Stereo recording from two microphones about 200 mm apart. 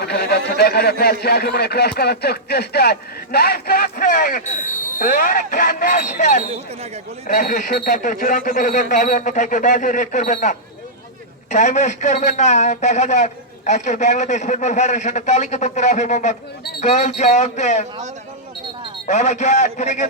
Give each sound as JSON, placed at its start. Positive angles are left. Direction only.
{"t": 0.0, "sound": "a man's voice", "side_deg": 55}
{"t": 19.0, "sound": "a man's voice", "side_deg": 35}